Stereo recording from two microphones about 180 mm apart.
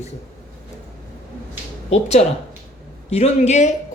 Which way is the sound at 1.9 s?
35° left (ahead or behind).